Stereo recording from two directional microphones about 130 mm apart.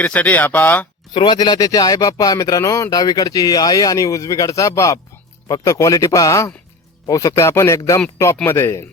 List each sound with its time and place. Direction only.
0.0 s speech: 10° left (ahead or behind)
1.1 s speech: 35° left (ahead or behind); by 8.8 s 20° left (ahead or behind)